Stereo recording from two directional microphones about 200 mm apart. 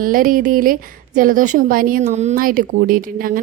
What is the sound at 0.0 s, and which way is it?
A woman's voice, 45° right (ahead or behind).